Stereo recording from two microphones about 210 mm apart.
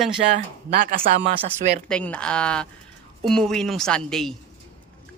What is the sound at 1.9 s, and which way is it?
Speech, 5° left (ahead or behind).